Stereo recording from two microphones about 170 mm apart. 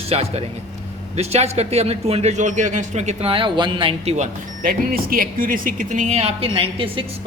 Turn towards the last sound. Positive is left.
turn(degrees=-30)  # may be behind; listen again after turning